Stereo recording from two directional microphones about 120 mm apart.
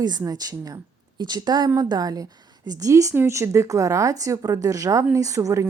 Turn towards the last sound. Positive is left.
turn(degrees=-25)  # may be behind; listen again after turning